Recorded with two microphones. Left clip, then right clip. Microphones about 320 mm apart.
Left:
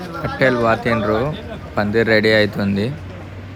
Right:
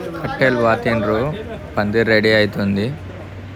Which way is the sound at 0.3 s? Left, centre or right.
Centre.